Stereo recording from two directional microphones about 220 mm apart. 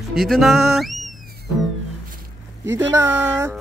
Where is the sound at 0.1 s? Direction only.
Centre (ahead or behind).